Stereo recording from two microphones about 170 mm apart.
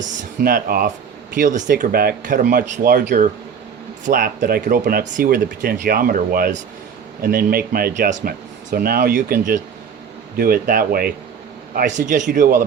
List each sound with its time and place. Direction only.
0.0 s speech: 60° right (ahead or behind)